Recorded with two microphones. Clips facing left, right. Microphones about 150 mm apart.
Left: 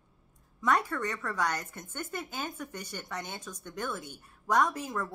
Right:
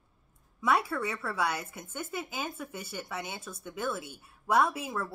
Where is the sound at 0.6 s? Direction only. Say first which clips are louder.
Even; 10° right (ahead or behind).